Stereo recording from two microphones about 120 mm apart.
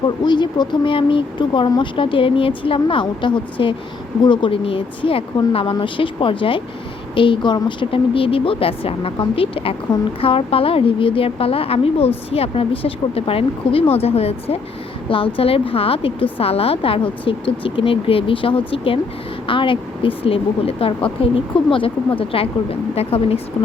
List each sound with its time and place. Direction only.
0.3 s a woman's voice: 40° left (ahead or behind)